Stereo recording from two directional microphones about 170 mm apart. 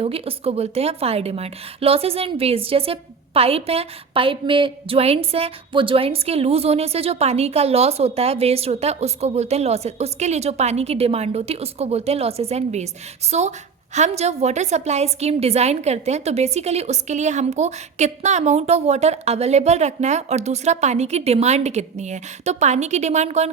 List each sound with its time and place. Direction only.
0.0 s a woman's voice: 35° right (ahead or behind)